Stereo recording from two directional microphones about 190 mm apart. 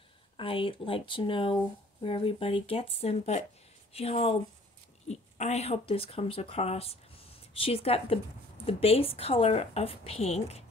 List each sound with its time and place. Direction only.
0.4 s a woman's voice: 30° left (ahead or behind)